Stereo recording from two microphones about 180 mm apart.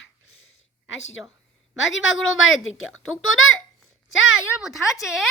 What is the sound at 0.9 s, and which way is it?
A woman's voice, 90° left.